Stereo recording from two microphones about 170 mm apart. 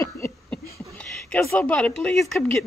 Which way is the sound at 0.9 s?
5° left (ahead or behind).